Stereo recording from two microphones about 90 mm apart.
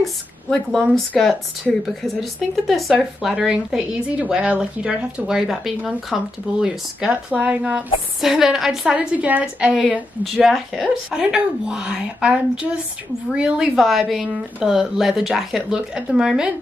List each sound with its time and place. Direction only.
0.0 s a woman's voice: 5° left (ahead or behind)
8.9 s a woman's voice: 15° right (ahead or behind)
10.2 s speech: centre (ahead or behind)
11.1 s a woman's voice: 10° right (ahead or behind)